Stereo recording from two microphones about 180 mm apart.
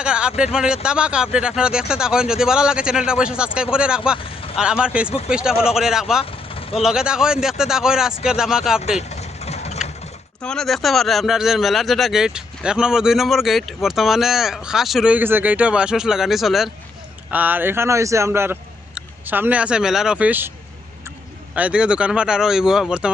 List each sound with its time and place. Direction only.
0.0 s speech: 5° right (ahead or behind)
9.0 s vehicle: 35° left (ahead or behind)
10.4 s speech: 5° left (ahead or behind)
21.5 s speech: 5° right (ahead or behind)